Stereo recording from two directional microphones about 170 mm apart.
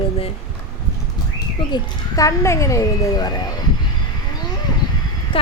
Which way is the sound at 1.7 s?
20° left (ahead or behind).